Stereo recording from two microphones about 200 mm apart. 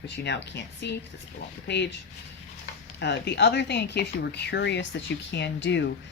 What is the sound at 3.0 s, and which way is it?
Speech, 60° left (ahead or behind).